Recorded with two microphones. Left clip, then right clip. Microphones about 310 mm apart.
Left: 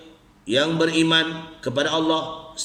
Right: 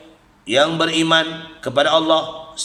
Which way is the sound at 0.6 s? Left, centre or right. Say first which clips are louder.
Right 4 dB; centre.